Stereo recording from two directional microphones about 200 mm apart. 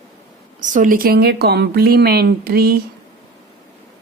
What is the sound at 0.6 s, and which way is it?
A woman's voice, 40° right (ahead or behind).